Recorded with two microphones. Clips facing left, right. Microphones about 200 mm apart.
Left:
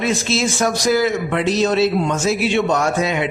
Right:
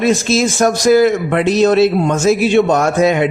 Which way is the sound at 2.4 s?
45° right (ahead or behind).